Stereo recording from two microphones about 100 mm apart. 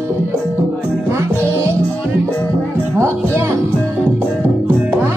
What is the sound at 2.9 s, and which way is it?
Music, 30° right (ahead or behind).